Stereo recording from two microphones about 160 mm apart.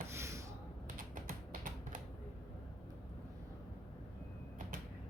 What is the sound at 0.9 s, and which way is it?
Typing, 60° right (ahead or behind).